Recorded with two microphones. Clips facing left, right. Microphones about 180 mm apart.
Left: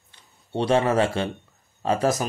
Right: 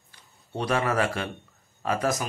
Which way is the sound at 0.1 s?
30° left (ahead or behind).